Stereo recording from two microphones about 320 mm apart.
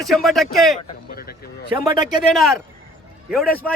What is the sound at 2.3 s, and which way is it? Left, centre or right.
Speech, centre.